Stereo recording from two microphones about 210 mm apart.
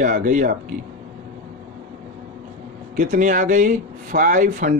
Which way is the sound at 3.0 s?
35° right (ahead or behind).